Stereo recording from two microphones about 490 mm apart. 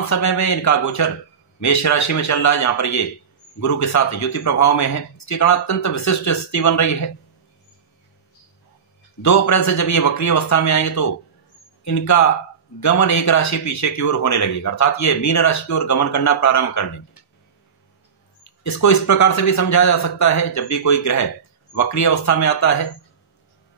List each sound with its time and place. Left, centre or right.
0.0 s speech: left
9.2 s speech: left
18.4 s speech: left